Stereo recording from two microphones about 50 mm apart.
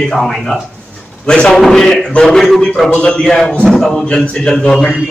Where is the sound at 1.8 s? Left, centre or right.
Centre.